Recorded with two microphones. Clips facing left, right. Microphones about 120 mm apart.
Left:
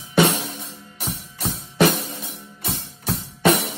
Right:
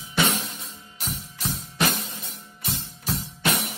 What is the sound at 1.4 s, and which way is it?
Music, 60° left (ahead or behind).